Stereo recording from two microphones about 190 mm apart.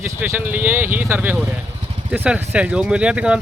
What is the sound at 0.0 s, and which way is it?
Speech, 10° right (ahead or behind).